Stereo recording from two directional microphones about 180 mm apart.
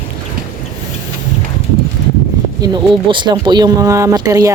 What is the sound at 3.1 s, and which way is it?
Speech, 25° right (ahead or behind).